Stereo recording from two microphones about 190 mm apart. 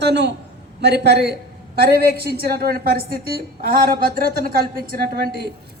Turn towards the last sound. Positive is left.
turn(degrees=-55)  # may be behind; listen again after turning